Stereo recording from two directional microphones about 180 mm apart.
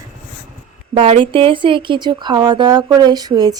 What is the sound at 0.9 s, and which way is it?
Speech, 30° right (ahead or behind).